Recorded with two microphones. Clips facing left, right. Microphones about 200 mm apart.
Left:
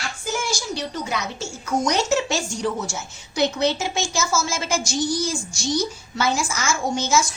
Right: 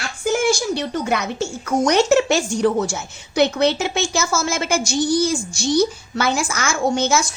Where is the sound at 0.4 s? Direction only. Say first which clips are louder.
Right 8 dB; 55° right (ahead or behind).